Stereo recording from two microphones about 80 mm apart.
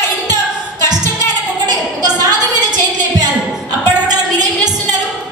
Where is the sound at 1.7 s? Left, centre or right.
Right.